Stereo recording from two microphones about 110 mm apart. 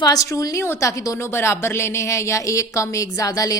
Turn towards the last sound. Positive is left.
turn(degrees=30)  # may be behind; listen again after turning